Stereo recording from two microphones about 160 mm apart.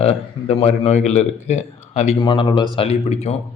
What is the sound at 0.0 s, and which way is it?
A man's voice, 40° left (ahead or behind).